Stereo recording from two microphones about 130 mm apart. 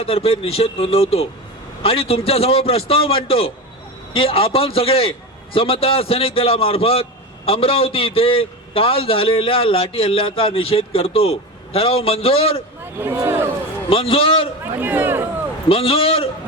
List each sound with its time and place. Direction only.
0.0 s a man's voice: 50° left (ahead or behind)
13.0 s a man's voice: 20° right (ahead or behind)
13.9 s a man's voice: 45° left (ahead or behind)
14.6 s speech: 15° right (ahead or behind)
15.7 s a man's voice: 45° left (ahead or behind)